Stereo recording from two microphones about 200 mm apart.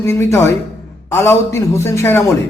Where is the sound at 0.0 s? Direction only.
15° left (ahead or behind).